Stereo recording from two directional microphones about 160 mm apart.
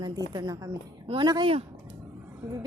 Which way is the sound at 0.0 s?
25° right (ahead or behind).